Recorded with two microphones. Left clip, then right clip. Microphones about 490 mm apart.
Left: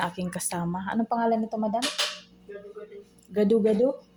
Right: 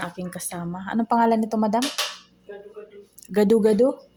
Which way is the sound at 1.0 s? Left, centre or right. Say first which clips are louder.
Right 7 dB; right.